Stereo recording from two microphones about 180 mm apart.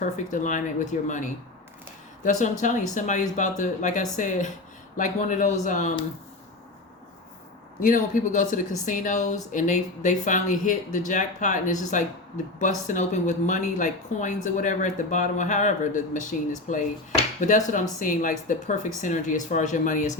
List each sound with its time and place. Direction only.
0.0 s speech: 45° left (ahead or behind)
7.8 s speech: 45° left (ahead or behind)
18.0 s speech: 45° left (ahead or behind)